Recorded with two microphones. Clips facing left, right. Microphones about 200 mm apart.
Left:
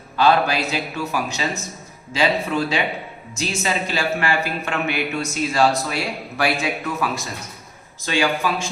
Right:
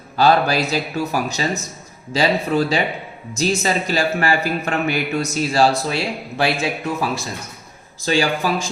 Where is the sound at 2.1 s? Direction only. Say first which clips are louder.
Right 2 dB; 40° right (ahead or behind).